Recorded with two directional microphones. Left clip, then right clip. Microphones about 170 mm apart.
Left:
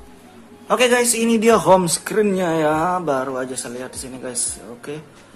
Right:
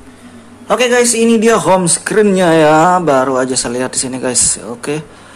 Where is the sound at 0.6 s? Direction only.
Centre (ahead or behind).